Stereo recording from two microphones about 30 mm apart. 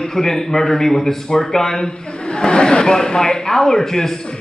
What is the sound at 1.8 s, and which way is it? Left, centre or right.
A man's voice, left.